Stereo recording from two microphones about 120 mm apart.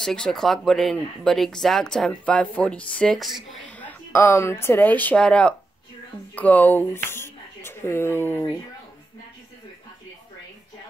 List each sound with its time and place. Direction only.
0.0 s speech: 5° left (ahead or behind)
3.6 s speech: 15° left (ahead or behind)